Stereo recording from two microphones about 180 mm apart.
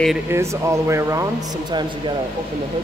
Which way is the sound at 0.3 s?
15° right (ahead or behind).